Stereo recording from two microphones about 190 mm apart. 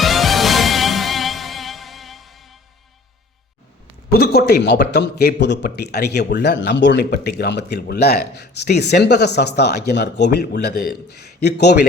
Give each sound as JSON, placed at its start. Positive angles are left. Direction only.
{"t": 0.0, "sound": "music", "side_deg": 0}
{"t": 4.1, "sound": "speech", "side_deg": 55}